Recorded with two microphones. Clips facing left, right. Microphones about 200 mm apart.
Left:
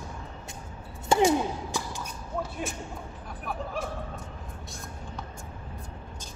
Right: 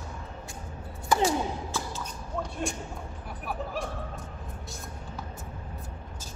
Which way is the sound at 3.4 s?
Centre (ahead or behind).